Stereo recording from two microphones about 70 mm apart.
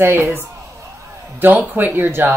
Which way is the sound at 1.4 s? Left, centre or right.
Right.